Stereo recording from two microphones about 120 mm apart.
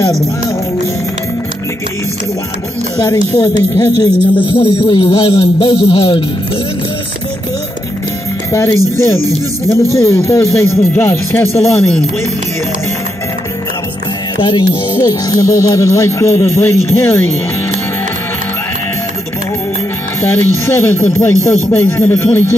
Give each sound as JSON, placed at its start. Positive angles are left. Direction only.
{"t": 3.3, "sound": "speech", "side_deg": 30}
{"t": 4.6, "sound": "music", "side_deg": 45}
{"t": 8.5, "sound": "speech", "side_deg": 25}
{"t": 15.0, "sound": "speech", "side_deg": 30}
{"t": 20.6, "sound": "speech", "side_deg": 20}